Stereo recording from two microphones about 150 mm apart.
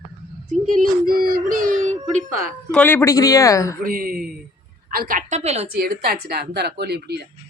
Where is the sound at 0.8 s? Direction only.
70° right (ahead or behind); by 2.0 s 55° right (ahead or behind).